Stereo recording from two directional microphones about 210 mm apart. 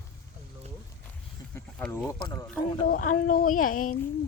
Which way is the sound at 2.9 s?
40° left (ahead or behind).